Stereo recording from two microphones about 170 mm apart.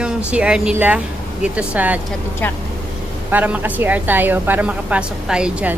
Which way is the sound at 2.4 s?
10° left (ahead or behind).